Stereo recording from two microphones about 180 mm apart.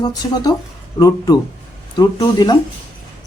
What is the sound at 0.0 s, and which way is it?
Speech, 20° left (ahead or behind).